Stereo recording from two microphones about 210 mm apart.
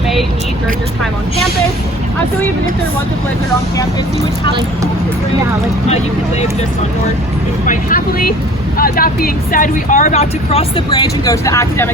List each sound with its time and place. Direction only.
7.7 s speech: 40° left (ahead or behind); by 11.9 s 15° left (ahead or behind)